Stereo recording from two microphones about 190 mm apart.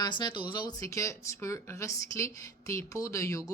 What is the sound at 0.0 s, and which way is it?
A woman's voice, 20° left (ahead or behind).